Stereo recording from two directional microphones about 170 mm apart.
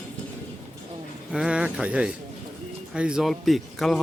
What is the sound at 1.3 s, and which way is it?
Speech, 5° right (ahead or behind).